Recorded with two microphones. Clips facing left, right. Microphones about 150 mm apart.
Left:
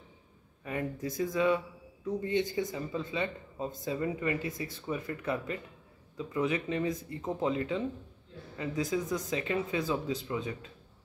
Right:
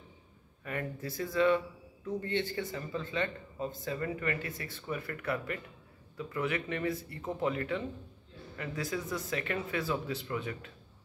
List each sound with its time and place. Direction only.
0.7 s speech: 15° left (ahead or behind)